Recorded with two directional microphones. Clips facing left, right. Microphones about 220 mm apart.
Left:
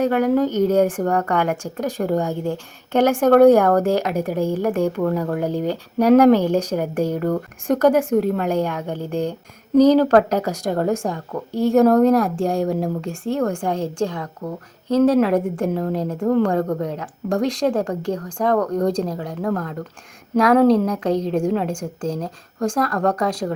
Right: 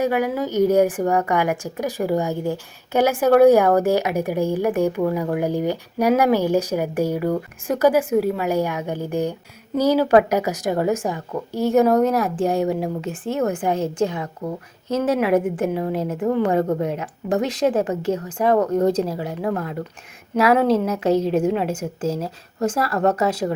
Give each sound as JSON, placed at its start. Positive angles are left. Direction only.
{"t": 0.0, "sound": "speech", "side_deg": -10}
{"t": 16.5, "sound": "speech", "side_deg": -25}
{"t": 16.7, "sound": "speech", "side_deg": -10}
{"t": 18.5, "sound": "speech", "side_deg": -25}
{"t": 18.9, "sound": "speech", "side_deg": -5}